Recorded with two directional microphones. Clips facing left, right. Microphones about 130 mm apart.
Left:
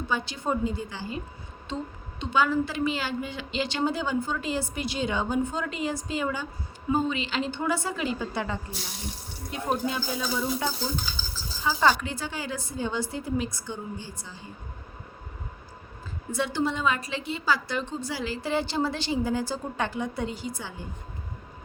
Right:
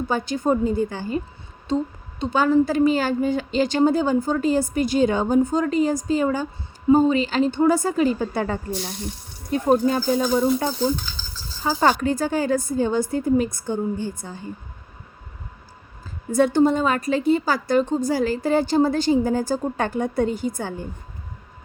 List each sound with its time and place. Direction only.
0.1 s a woman's voice: 45° right (ahead or behind)
16.3 s a woman's voice: 45° right (ahead or behind)